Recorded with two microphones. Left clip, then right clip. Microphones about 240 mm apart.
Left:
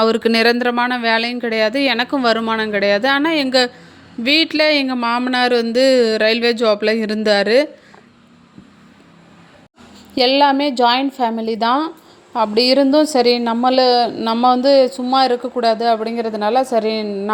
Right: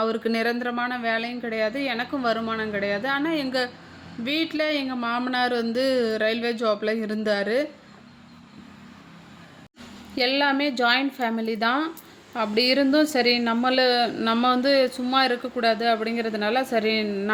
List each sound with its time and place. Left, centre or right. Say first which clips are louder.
0.0 s speech: left 10 dB; left
10.2 s a woman's voice: left 9 dB; left